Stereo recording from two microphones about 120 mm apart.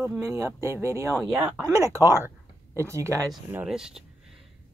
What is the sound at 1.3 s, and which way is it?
Speech, 10° right (ahead or behind).